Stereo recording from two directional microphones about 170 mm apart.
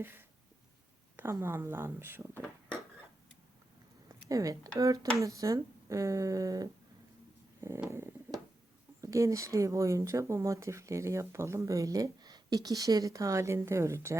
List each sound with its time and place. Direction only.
0.0 s a sound: 10° right (ahead or behind)
1.1 s speech: 15° right (ahead or behind)
4.3 s speech: 20° right (ahead or behind)